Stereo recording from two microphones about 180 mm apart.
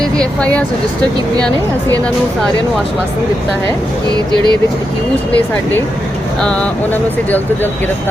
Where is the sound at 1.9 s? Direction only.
5° left (ahead or behind).